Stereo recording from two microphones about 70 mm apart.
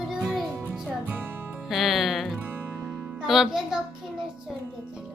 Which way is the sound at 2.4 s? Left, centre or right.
Right.